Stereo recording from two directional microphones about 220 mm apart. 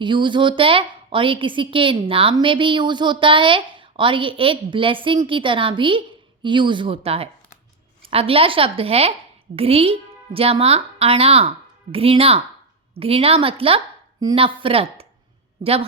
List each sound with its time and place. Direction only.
0.0 s a woman's voice: 20° right (ahead or behind)